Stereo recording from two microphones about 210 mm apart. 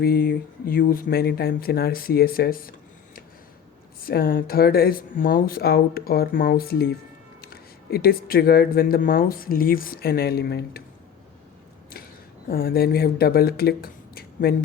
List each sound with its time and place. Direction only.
0.0 s speech: 45° left (ahead or behind)
4.0 s speech: 45° left (ahead or behind)
12.5 s speech: 45° left (ahead or behind)